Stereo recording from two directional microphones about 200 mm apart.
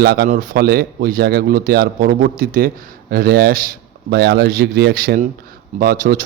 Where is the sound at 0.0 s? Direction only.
50° right (ahead or behind).